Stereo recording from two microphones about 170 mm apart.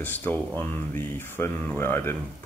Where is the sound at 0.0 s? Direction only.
10° left (ahead or behind).